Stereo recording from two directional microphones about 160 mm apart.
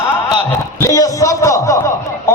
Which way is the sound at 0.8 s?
20° left (ahead or behind).